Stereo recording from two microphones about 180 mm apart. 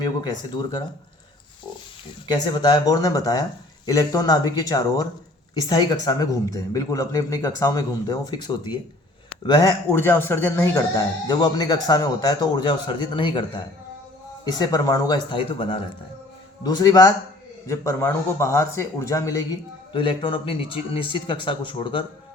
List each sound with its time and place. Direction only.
0.0 s speech: 25° left (ahead or behind)
2.2 s a man's voice: 25° left (ahead or behind)
19.9 s speech: 30° left (ahead or behind)